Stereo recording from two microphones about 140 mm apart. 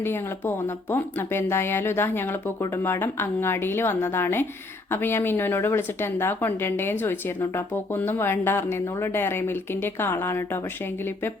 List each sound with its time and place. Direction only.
0.0 s speech: 15° left (ahead or behind)